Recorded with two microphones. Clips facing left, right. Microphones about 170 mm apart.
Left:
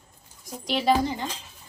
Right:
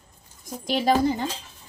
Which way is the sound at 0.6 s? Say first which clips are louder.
Right 2 dB; 45° right (ahead or behind).